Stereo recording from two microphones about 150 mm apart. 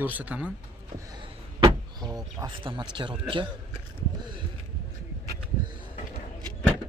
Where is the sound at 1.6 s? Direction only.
25° right (ahead or behind).